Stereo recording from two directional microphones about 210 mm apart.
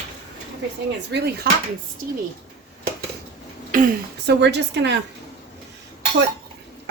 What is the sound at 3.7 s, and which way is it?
A woman's voice, 45° right (ahead or behind).